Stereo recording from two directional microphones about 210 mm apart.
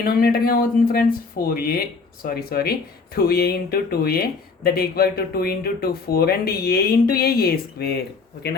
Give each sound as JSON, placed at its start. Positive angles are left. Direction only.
{"t": 0.0, "sound": "speech", "side_deg": 45}